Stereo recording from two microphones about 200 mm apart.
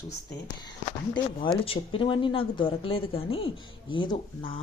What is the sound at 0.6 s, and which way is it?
Speech, 20° left (ahead or behind).